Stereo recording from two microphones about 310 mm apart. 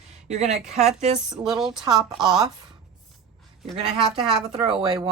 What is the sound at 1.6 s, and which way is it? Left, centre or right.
Speech, centre.